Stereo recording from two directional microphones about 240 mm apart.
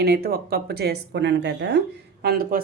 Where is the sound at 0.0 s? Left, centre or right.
Right.